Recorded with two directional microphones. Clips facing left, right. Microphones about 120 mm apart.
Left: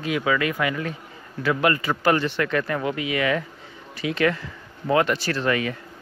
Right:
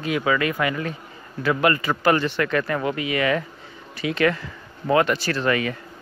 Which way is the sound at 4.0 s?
65° right (ahead or behind).